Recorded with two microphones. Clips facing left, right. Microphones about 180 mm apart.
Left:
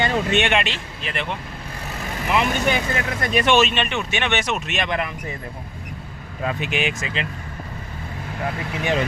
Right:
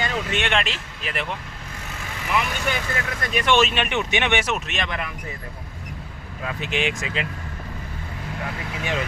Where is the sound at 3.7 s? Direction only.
10° right (ahead or behind).